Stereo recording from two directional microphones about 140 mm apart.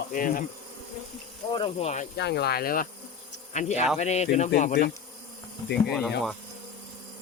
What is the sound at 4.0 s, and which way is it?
Speech, 55° left (ahead or behind).